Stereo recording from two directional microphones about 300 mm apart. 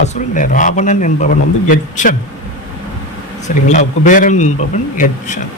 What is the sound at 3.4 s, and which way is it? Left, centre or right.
A man's voice, left.